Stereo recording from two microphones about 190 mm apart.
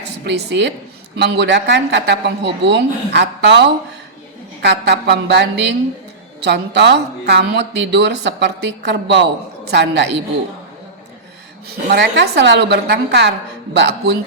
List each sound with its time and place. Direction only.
0.3 s speech: 65° right (ahead or behind)
11.7 s speech: 60° right (ahead or behind)